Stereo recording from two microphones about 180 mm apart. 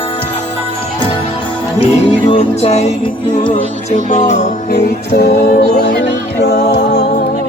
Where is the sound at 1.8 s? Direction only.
30° left (ahead or behind).